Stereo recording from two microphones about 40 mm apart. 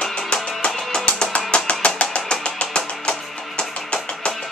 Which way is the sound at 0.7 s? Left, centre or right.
Centre.